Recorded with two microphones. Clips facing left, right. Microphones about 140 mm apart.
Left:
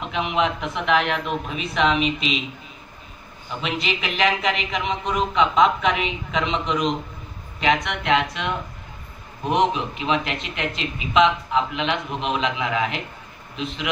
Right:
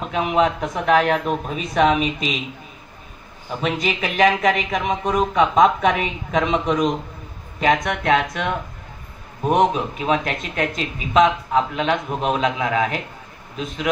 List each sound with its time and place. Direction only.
0.0 s a man's voice: 40° right (ahead or behind)
3.4 s a man's voice: 45° right (ahead or behind)
9.5 s a man's voice: 45° right (ahead or behind)